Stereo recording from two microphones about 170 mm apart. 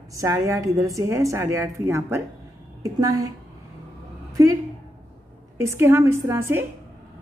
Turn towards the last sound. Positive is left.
turn(degrees=-15)  # may be behind; listen again after turning